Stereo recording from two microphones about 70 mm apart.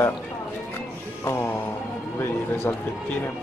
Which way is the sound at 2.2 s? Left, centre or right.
Left.